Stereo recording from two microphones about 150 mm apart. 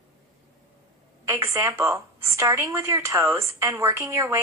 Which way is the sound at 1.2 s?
20° right (ahead or behind).